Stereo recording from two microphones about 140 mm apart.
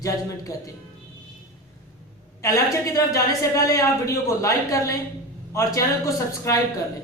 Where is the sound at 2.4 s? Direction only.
25° left (ahead or behind).